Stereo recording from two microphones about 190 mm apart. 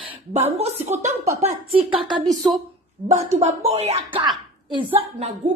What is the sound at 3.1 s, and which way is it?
A woman's voice, 35° right (ahead or behind).